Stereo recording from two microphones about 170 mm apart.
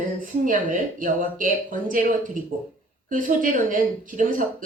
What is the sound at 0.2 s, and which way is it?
Speech, 50° right (ahead or behind).